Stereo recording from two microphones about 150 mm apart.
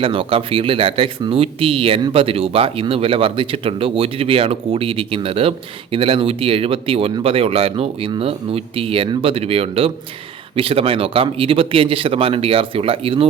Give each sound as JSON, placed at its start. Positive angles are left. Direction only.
{"t": 0.0, "sound": "speech", "side_deg": -35}